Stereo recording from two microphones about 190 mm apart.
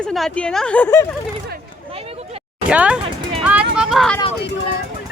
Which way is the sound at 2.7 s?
5° right (ahead or behind).